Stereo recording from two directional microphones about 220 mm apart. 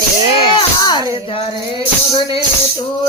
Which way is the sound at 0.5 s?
20° left (ahead or behind).